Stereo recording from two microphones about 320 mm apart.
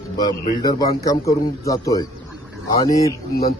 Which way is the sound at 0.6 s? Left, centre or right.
Centre.